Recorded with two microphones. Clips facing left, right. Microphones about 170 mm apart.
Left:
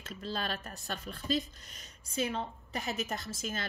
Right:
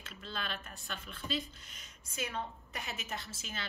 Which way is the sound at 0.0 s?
40° left (ahead or behind).